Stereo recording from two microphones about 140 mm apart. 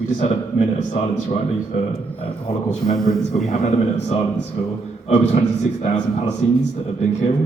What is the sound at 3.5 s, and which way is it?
Speech, 55° left (ahead or behind).